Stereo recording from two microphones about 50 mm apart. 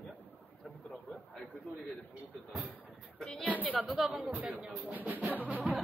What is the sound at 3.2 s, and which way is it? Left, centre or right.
Speech, centre.